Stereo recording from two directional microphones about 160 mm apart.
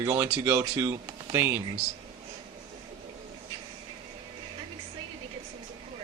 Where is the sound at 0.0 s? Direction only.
15° right (ahead or behind).